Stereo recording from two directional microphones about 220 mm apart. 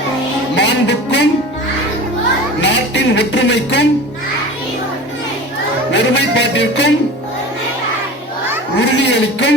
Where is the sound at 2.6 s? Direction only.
55° left (ahead or behind).